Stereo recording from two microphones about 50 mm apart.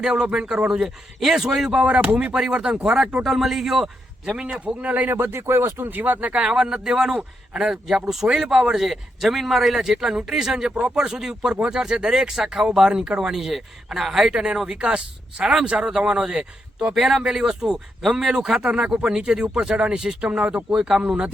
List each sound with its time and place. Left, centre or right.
0.0 s speech: centre
4.3 s a man's voice: right
5.1 s speech: right
16.9 s a man's voice: centre; by 20.7 s right
20.7 s speech: centre